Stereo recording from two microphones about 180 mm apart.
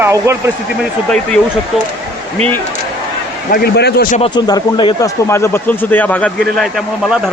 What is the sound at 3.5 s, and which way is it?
Speech, 65° left (ahead or behind).